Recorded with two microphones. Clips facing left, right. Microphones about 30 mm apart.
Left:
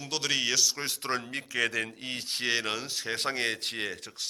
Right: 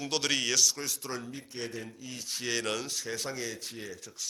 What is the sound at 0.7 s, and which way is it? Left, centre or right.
Speech, left.